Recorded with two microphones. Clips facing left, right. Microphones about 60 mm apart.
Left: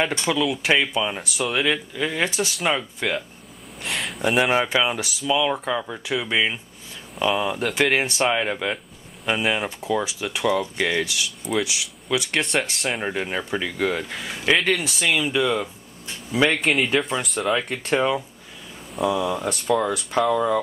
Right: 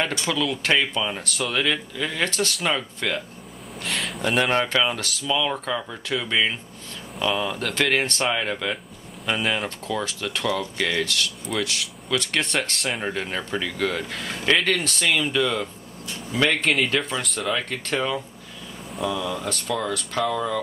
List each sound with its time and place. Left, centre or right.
0.1 s speech: centre
3.8 s a sound: centre
4.2 s speech: centre